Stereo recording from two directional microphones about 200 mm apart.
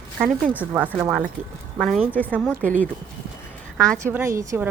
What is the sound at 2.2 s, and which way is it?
Speech, 5° left (ahead or behind).